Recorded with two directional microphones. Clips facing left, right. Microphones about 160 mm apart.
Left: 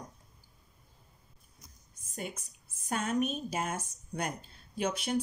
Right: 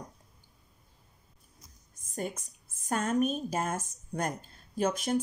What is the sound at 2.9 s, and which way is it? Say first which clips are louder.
Speech: right 3 dB; 45° right (ahead or behind).